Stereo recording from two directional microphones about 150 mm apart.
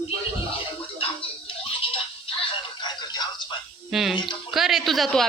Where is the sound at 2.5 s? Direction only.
30° left (ahead or behind).